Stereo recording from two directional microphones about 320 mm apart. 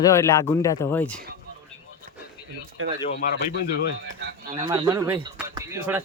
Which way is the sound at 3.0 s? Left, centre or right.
Left.